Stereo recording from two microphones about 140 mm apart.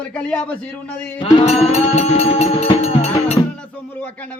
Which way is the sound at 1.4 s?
50° left (ahead or behind).